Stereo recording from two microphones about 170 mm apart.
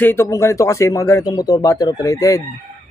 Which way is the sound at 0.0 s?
15° left (ahead or behind).